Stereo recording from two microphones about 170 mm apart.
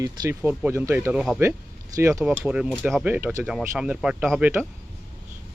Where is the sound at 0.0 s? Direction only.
20° right (ahead or behind).